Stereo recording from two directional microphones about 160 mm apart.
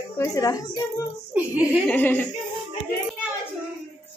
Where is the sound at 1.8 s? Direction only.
10° left (ahead or behind).